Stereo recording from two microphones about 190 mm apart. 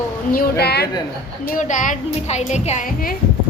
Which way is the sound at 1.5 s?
40° left (ahead or behind).